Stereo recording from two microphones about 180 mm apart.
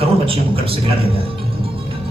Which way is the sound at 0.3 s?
30° right (ahead or behind).